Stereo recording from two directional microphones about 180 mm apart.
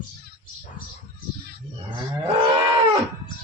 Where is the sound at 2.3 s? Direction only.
30° right (ahead or behind).